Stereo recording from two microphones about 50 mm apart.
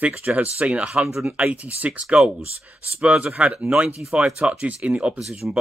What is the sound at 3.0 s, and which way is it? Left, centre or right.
Speech, right.